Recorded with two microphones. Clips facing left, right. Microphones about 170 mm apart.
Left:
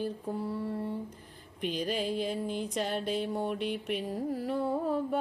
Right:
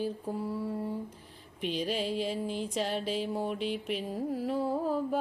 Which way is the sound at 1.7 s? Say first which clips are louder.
Even; 45° left (ahead or behind).